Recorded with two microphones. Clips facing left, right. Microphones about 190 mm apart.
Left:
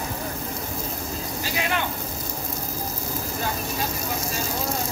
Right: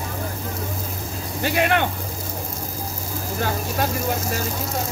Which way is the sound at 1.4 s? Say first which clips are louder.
Right 8 dB; 60° right (ahead or behind).